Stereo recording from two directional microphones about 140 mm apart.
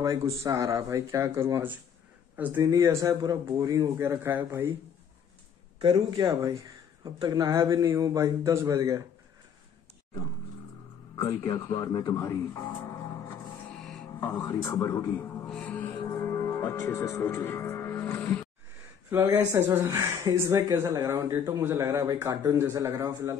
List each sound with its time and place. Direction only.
0.0 s speech: 25° right (ahead or behind)
5.8 s speech: 35° right (ahead or behind)
11.5 s speech: 25° left (ahead or behind)
12.8 s music: 15° left (ahead or behind)
13.7 s music: centre (ahead or behind)
14.5 s speech: 20° left (ahead or behind)
15.4 s music: 10° left (ahead or behind)
19.0 s speech: 20° right (ahead or behind)